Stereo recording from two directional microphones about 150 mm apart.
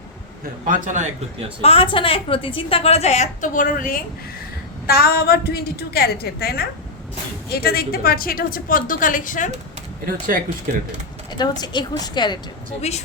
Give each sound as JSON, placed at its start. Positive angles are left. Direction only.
{"t": 0.7, "sound": "a man's voice", "side_deg": -55}
{"t": 1.6, "sound": "a woman's voice", "side_deg": 40}
{"t": 4.9, "sound": "a woman's voice", "side_deg": 90}
{"t": 10.1, "sound": "speech", "side_deg": -70}
{"t": 11.3, "sound": "a woman's voice", "side_deg": 30}
{"t": 12.9, "sound": "a woman's voice", "side_deg": 45}